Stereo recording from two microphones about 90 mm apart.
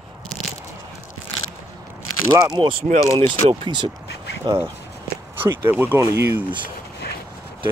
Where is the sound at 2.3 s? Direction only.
35° right (ahead or behind).